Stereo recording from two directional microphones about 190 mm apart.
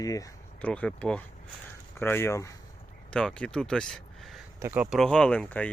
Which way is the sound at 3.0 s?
5° left (ahead or behind).